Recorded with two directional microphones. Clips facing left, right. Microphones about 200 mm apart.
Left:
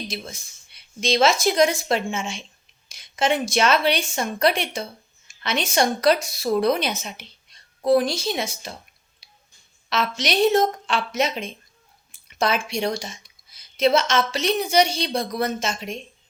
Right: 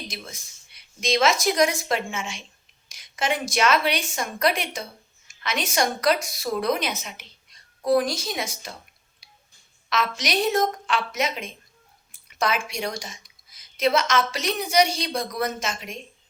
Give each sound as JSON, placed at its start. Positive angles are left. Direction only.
{"t": 0.1, "sound": "a woman's voice", "side_deg": 30}
{"t": 9.2, "sound": "a sound", "side_deg": 25}
{"t": 9.9, "sound": "speech", "side_deg": 30}